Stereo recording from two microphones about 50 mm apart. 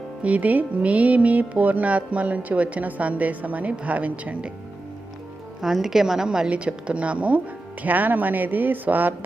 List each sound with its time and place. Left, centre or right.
0.2 s music: right
5.6 s a woman's voice: centre
6.5 s speech: right